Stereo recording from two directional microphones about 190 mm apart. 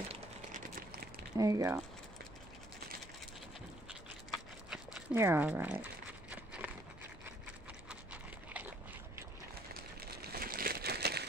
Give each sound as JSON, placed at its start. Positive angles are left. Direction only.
{"t": 0.1, "sound": "a sound", "side_deg": -40}
{"t": 1.3, "sound": "speech", "side_deg": -15}
{"t": 4.6, "sound": "speech", "side_deg": -10}
{"t": 6.3, "sound": "run", "side_deg": -5}
{"t": 7.9, "sound": "dog", "side_deg": -10}
{"t": 9.9, "sound": "crumpling", "side_deg": -55}